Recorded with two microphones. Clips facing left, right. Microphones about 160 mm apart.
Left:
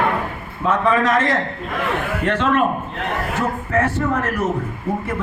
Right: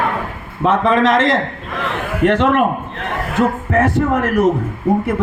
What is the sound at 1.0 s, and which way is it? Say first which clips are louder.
Speech: right 4 dB; 90° right.